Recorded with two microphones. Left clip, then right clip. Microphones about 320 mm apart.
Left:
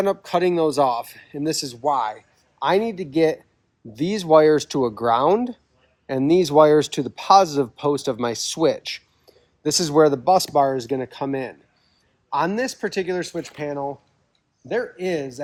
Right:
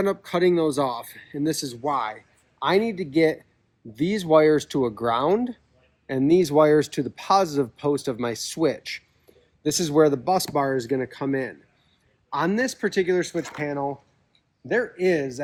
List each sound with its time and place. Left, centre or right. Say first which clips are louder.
0.0 s speech: left 2 dB; left